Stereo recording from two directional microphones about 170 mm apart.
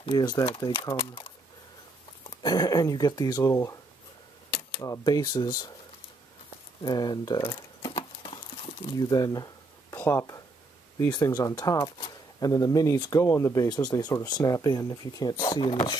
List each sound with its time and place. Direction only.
0.0 s speech: 25° left (ahead or behind)
2.2 s speech: 25° left (ahead or behind)
4.5 s camera: 10° left (ahead or behind)
4.8 s speech: 20° left (ahead or behind)
6.8 s crumpling: 25° left (ahead or behind)
11.1 s speech: 20° left (ahead or behind)